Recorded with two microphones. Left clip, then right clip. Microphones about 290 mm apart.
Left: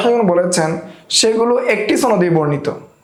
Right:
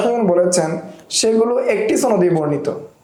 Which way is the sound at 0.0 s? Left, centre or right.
Left.